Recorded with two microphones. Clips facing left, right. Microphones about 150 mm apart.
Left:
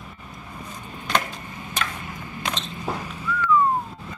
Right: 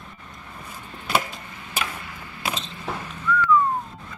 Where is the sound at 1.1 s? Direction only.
5° right (ahead or behind).